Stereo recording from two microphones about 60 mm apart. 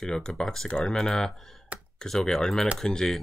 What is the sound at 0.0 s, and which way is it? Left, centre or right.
Speech, centre.